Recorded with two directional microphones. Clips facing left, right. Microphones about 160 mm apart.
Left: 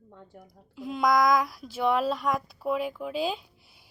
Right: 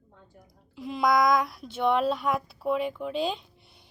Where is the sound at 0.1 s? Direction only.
60° left (ahead or behind).